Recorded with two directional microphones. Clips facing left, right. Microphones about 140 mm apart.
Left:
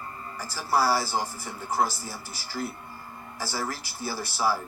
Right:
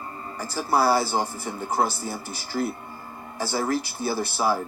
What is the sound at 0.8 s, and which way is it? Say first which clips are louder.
Speech: right 3 dB; 20° right (ahead or behind).